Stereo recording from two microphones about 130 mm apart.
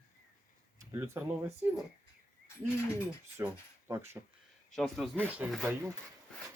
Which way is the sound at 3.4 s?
20° right (ahead or behind).